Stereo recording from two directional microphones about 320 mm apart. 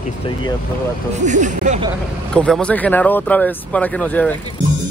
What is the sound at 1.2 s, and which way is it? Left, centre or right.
Speech, right.